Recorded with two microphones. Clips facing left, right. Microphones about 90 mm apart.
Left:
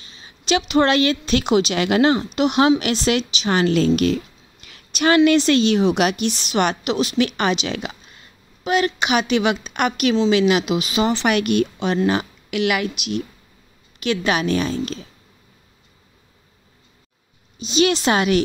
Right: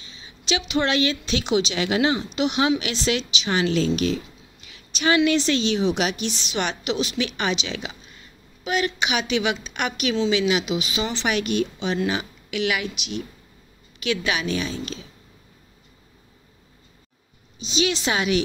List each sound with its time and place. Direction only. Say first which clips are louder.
0.0 s a woman's voice: left 1 dB; 45° left (ahead or behind)
8.6 s speech: left 5 dB; 40° left (ahead or behind)
17.6 s speech: left 6 dB; 50° left (ahead or behind)